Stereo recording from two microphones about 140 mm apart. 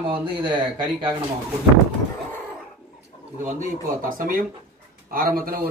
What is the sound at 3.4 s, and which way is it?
A man's voice, 80° right.